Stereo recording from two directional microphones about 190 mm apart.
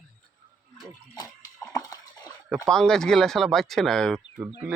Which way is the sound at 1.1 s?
20° left (ahead or behind).